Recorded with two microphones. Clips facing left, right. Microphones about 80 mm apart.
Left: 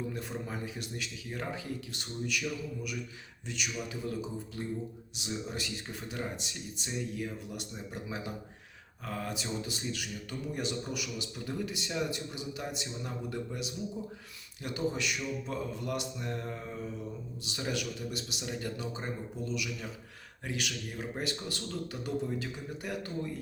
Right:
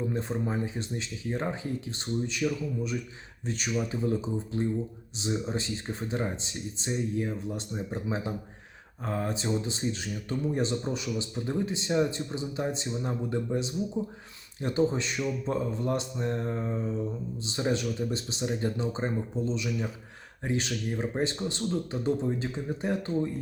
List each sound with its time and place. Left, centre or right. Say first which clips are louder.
0.1 s speech: right 7 dB; right